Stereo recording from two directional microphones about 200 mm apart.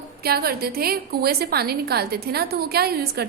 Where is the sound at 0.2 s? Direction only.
50° right (ahead or behind).